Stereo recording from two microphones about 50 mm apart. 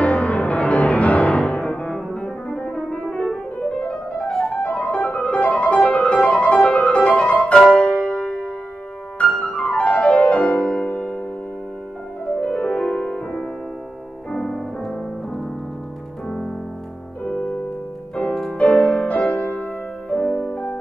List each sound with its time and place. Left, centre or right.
0.0 s music: left
12.4 s music: left; by 15.4 s centre
16.3 s piano: centre
17.2 s music: left
18.6 s music: left
20.2 s music: centre